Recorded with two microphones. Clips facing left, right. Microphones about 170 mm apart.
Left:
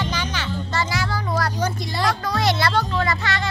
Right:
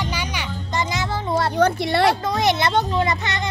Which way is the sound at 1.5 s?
60° right (ahead or behind).